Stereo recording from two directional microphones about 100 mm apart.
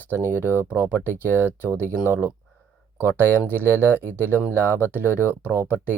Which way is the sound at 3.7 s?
20° left (ahead or behind).